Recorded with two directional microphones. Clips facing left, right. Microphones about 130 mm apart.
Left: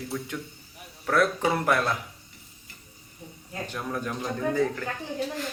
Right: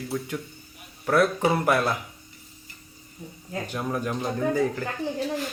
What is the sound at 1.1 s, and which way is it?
Speech, 5° right (ahead or behind).